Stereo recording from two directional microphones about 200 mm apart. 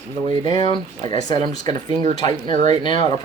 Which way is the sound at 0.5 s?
20° left (ahead or behind).